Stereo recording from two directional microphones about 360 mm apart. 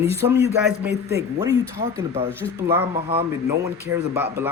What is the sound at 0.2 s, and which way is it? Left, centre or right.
Speech, centre.